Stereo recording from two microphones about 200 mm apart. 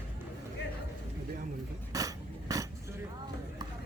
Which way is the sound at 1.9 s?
15° right (ahead or behind).